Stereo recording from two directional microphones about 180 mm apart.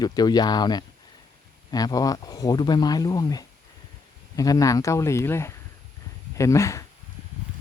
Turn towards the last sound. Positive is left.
turn(degrees=15)  # may be behind; listen again after turning